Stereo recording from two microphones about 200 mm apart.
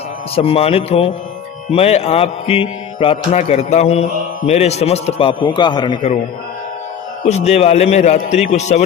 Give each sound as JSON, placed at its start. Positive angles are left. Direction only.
{"t": 0.3, "sound": "a man's voice", "side_deg": 30}
{"t": 1.7, "sound": "mantra", "side_deg": 30}
{"t": 4.4, "sound": "a man's voice", "side_deg": 30}
{"t": 7.3, "sound": "mantra", "side_deg": 35}